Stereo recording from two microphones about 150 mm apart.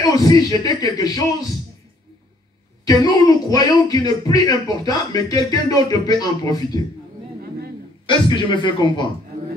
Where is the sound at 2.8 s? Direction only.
25° left (ahead or behind).